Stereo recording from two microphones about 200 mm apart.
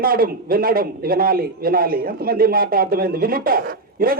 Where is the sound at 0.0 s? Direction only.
45° right (ahead or behind).